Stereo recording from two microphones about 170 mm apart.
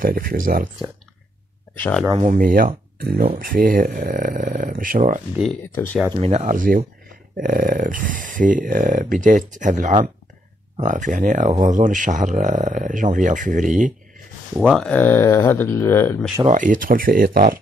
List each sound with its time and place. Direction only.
0.0 s speech: 55° right (ahead or behind)
1.8 s speech: 10° left (ahead or behind)
2.2 s speech: 55° right (ahead or behind)
6.1 s speech: 40° right (ahead or behind)
14.6 s speech: centre (ahead or behind)
16.4 s speech: 50° right (ahead or behind)